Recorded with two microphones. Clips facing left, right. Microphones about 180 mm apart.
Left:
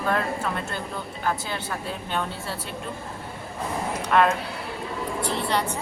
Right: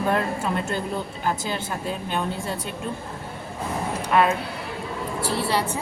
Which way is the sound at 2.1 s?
15° right (ahead or behind).